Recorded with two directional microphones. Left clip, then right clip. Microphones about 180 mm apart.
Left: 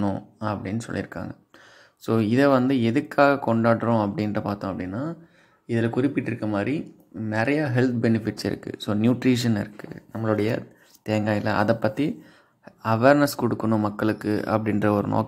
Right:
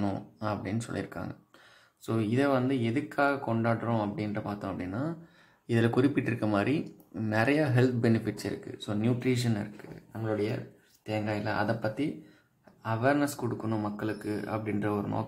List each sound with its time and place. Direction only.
0.0 s speech: 20° left (ahead or behind)
2.0 s speech: 35° left (ahead or behind)
5.7 s speech: 5° left (ahead or behind)
7.2 s speech: 15° left (ahead or behind); by 15.2 s 40° left (ahead or behind)